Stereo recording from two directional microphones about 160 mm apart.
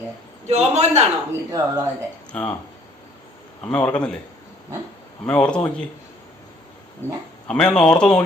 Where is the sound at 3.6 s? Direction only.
10° left (ahead or behind).